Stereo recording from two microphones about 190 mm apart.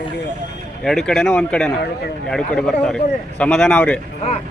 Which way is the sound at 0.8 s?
Centre (ahead or behind).